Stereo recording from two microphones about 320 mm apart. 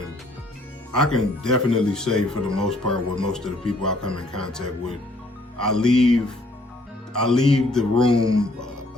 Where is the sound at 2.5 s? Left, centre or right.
Centre.